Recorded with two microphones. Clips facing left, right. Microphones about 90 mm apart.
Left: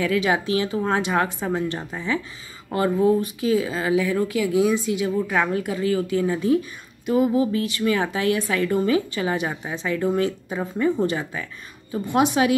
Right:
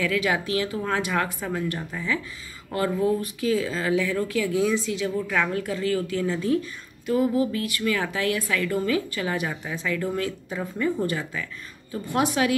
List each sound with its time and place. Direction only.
0.0 s speech: 20° left (ahead or behind)